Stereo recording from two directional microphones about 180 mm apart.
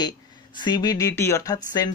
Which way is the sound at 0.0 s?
25° left (ahead or behind).